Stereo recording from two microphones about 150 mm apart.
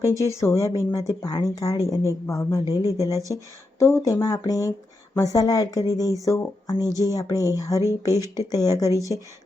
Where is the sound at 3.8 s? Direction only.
15° left (ahead or behind).